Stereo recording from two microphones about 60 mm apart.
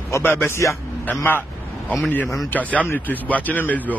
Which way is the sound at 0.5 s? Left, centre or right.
Left.